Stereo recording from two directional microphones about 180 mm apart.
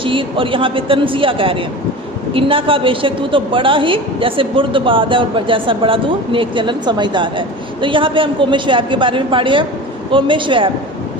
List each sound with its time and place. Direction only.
0.0 s a woman's voice: 30° right (ahead or behind)